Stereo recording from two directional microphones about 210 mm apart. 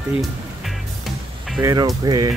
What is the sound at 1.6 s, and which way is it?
Speech, 20° right (ahead or behind).